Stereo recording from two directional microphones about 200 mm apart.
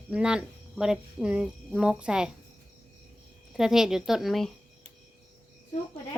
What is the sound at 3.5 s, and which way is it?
Speech, centre (ahead or behind).